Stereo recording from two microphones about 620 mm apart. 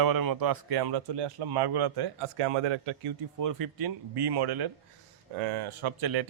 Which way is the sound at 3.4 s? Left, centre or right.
Right.